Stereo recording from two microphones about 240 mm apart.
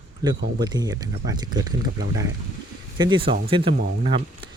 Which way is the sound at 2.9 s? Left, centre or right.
Centre.